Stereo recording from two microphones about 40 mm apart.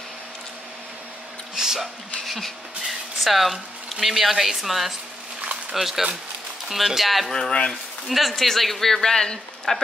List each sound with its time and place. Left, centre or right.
1.6 s speech: centre
2.2 s speech: centre
7.3 s speech: centre
8.1 s speech: centre